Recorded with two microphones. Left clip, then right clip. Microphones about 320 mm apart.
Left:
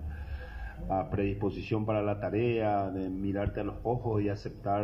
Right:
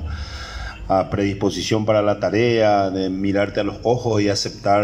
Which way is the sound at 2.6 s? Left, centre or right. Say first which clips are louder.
Right 14 dB; right.